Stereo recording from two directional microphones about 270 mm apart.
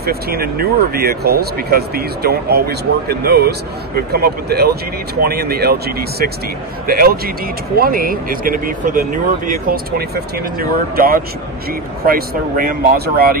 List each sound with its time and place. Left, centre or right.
0.0 s speech: right